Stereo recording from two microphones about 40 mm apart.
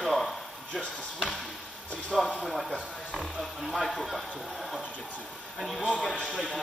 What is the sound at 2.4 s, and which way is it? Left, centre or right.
Speech, centre.